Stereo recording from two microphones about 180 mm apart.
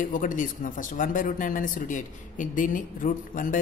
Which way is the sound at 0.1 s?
45° left (ahead or behind).